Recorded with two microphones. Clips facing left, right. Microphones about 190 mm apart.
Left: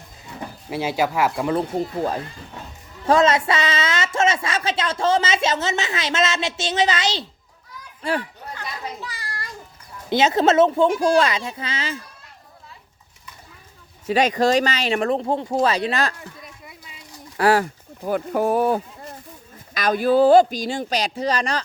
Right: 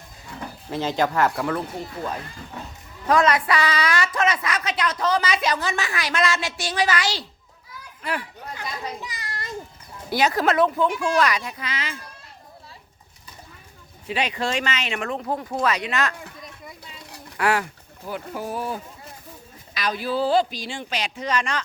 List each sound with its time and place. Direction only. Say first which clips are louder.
0.7 s speech: left 1 dB; 10° left (ahead or behind)
1.5 s speech: left 7 dB; 35° left (ahead or behind)
3.1 s a woman's voice: left 2 dB; 25° left (ahead or behind)
8.5 s children playing: even; 15° right (ahead or behind)
10.1 s a woman's voice: left 4 dB; 25° left (ahead or behind)
10.8 s a woman's voice: left 4 dB; 40° left (ahead or behind)
14.1 s speech: left 8 dB; 40° left (ahead or behind)
17.3 s speech: left 5 dB; 35° left (ahead or behind)
18.0 s speech: left 9 dB; 55° left (ahead or behind); by 21.6 s 35° left (ahead or behind)